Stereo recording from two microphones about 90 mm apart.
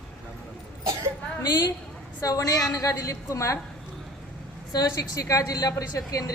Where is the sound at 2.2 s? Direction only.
45° left (ahead or behind).